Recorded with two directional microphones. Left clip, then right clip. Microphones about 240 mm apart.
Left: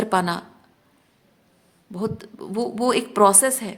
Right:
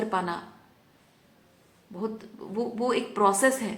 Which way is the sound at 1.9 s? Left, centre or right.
Left.